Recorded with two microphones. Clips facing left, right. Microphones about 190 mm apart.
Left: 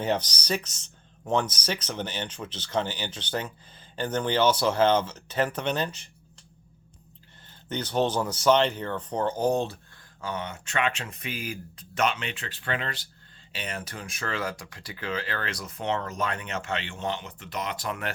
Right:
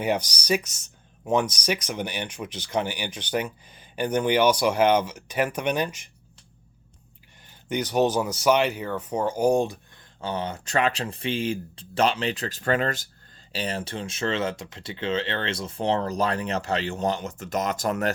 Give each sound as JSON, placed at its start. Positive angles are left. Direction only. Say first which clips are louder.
{"t": 0.0, "sound": "speech", "louder": "right 2 dB", "side_deg": -10}
{"t": 7.4, "sound": "speech", "louder": "right 5 dB", "side_deg": -10}
{"t": 10.2, "sound": "speech", "louder": "right 4 dB", "side_deg": -30}
{"t": 13.5, "sound": "speech", "louder": "right 6 dB", "side_deg": -30}